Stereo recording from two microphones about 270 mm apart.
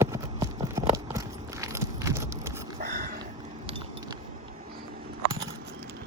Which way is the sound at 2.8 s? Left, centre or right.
Right.